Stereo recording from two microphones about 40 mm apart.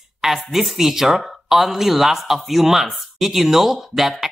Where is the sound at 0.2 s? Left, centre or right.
Centre.